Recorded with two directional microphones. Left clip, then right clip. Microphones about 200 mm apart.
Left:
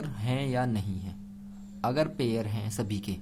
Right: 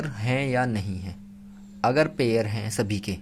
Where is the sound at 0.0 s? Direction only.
15° right (ahead or behind).